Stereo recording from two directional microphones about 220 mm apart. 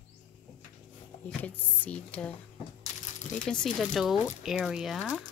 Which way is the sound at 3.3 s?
5° left (ahead or behind).